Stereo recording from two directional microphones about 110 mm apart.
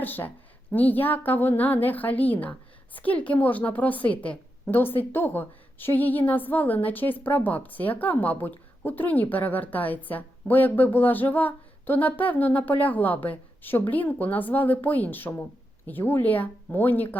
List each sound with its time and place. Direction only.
0.0 s a woman's voice: 15° left (ahead or behind)